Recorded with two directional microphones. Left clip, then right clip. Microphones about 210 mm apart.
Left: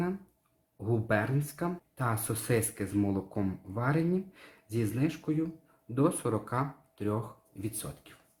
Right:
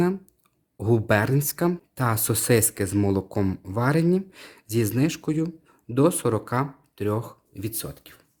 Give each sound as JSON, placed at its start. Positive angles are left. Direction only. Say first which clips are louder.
{"t": 0.8, "sound": "speech", "louder": "right 8 dB", "side_deg": -55}